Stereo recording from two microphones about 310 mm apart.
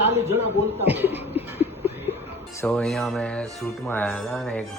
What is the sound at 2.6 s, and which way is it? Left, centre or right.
Speech, centre.